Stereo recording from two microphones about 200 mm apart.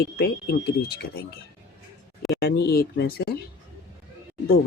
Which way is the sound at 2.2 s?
50° left (ahead or behind).